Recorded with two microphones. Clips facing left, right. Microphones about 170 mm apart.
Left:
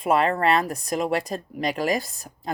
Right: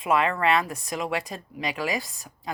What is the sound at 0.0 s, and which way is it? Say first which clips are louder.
Speech: left 3 dB; 40° left (ahead or behind).